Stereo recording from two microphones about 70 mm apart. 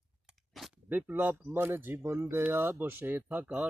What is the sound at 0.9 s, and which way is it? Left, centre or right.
Speech, right.